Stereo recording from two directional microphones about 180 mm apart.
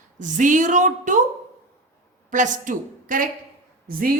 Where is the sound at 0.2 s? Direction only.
45° right (ahead or behind).